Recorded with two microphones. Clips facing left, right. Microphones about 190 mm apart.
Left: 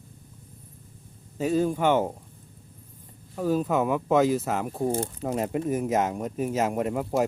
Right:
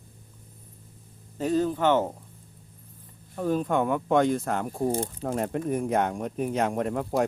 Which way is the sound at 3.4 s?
5° left (ahead or behind).